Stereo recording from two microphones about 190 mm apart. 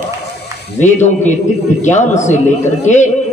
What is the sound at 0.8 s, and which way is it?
A man's voice, 40° left (ahead or behind).